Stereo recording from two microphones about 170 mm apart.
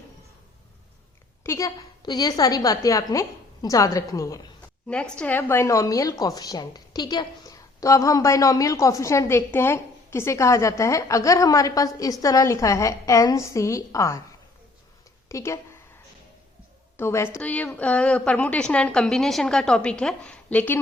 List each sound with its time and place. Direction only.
1.5 s a woman's voice: 20° left (ahead or behind)
4.9 s a woman's voice: 5° left (ahead or behind)
15.3 s a woman's voice: 15° left (ahead or behind)
17.0 s a woman's voice: 15° left (ahead or behind)